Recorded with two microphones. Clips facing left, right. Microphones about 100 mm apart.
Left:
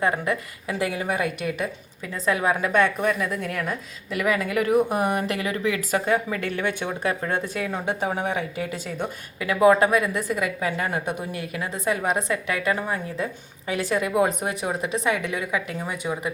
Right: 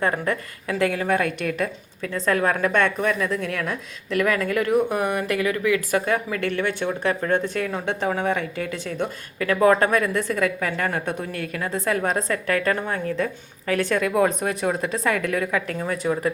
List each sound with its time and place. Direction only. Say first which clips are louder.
0.3 s speech: right 1 dB; 10° left (ahead or behind)